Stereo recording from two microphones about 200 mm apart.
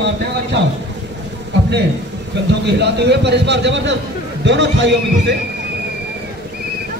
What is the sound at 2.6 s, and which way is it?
Speech, 60° right (ahead or behind).